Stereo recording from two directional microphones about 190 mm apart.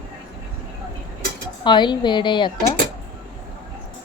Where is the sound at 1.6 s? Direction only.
25° left (ahead or behind).